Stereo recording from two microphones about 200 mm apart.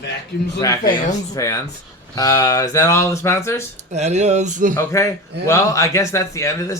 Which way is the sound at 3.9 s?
35° right (ahead or behind).